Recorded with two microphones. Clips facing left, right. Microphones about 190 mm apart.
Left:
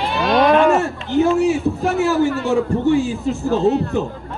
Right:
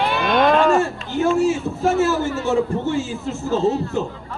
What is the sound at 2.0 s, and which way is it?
A man's voice, 15° left (ahead or behind).